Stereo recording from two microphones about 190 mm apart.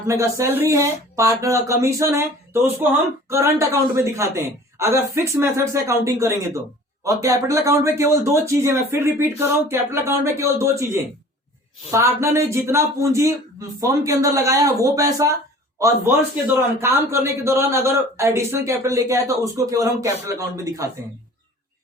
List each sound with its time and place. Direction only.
0.1 s speech: 15° right (ahead or behind)
16.8 s speech: 15° right (ahead or behind)